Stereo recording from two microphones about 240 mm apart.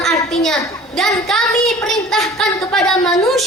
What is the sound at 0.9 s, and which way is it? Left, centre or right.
Speech, centre.